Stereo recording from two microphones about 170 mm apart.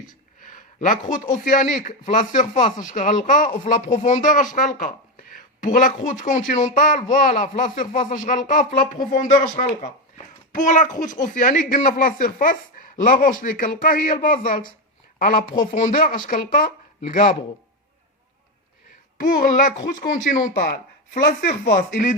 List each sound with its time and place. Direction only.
0.4 s speech: 50° left (ahead or behind)
15.7 s speech: 50° left (ahead or behind)
19.2 s speech: 50° left (ahead or behind)